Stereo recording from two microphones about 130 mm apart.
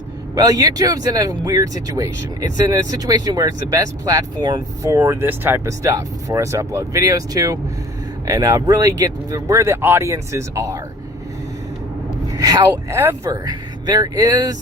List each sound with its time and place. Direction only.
0.3 s speech: 30° right (ahead or behind)
12.4 s speech: 30° right (ahead or behind)